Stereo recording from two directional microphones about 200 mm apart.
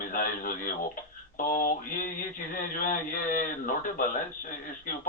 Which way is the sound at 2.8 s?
40° left (ahead or behind).